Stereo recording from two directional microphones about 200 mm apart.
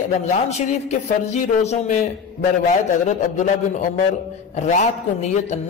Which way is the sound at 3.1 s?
40° left (ahead or behind).